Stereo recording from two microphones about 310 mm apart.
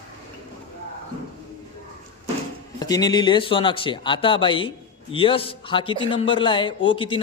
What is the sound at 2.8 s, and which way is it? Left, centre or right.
Speech, centre.